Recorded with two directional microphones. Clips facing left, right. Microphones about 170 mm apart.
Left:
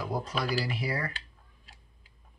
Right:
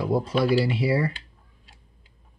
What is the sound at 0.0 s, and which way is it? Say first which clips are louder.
Speech: right 9 dB; 25° right (ahead or behind).